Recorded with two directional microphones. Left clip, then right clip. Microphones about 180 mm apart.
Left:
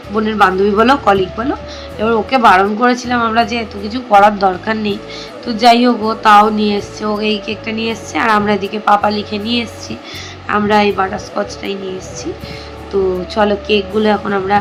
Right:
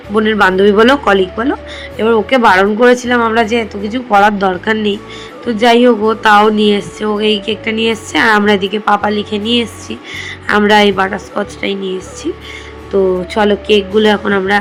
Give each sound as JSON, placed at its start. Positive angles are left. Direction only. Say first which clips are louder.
{"t": 0.1, "sound": "a woman's voice", "louder": "right 2 dB", "side_deg": -25}
{"t": 10.4, "sound": "speech", "louder": "right 3 dB", "side_deg": -30}
{"t": 12.9, "sound": "speech", "louder": "right 2 dB", "side_deg": -20}